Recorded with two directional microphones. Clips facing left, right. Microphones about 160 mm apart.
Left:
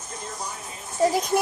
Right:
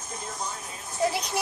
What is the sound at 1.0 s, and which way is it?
Music, 45° left (ahead or behind).